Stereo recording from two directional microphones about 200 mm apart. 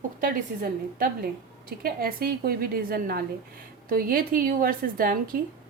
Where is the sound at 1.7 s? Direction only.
50° right (ahead or behind).